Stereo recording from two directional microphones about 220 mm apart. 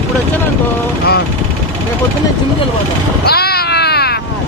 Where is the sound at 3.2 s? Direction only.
45° left (ahead or behind).